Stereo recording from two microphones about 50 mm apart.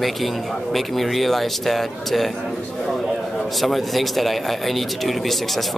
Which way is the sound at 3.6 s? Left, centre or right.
Centre.